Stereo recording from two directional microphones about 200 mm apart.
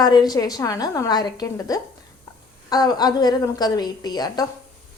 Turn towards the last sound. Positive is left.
turn(degrees=20)  # may be behind; listen again after turning